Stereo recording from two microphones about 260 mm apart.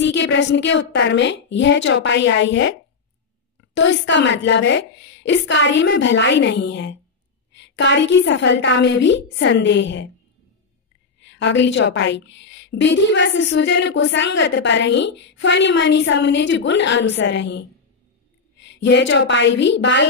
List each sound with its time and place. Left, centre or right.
0.0 s a woman's voice: left
3.7 s a woman's voice: left
11.1 s a woman's voice: left